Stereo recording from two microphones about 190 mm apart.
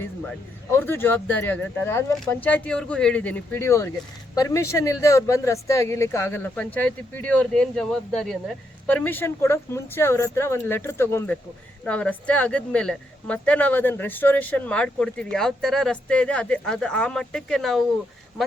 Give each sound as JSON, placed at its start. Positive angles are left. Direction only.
{"t": 0.0, "sound": "speech", "side_deg": 10}